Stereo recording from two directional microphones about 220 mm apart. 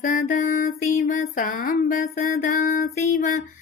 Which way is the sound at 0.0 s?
40° left (ahead or behind).